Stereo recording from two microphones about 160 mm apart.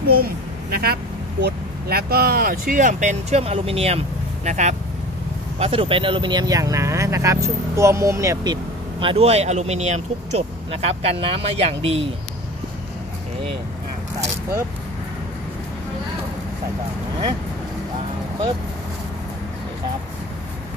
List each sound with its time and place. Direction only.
0.0 s a child's voice: 75° right (ahead or behind); by 4.7 s 45° right (ahead or behind)
5.6 s speech: 35° right (ahead or behind); by 8.5 s 20° right (ahead or behind)
9.0 s speech: 40° right (ahead or behind)